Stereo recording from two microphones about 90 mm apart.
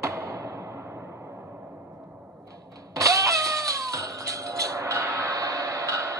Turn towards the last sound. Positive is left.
turn(degrees=-35)  # may be behind; listen again after turning